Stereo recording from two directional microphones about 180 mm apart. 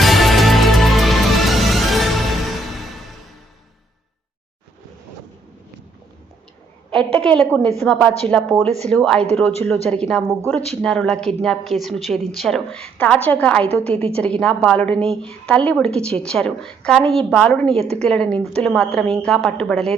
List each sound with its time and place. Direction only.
0.0 s music: centre (ahead or behind)
6.9 s a woman's voice: 5° left (ahead or behind)